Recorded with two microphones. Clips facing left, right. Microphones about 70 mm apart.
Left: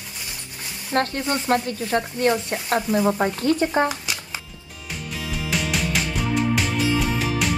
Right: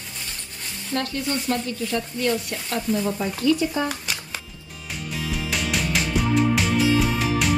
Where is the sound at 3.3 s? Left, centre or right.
Left.